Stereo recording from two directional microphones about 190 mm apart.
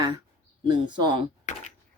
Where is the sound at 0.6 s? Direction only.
25° right (ahead or behind).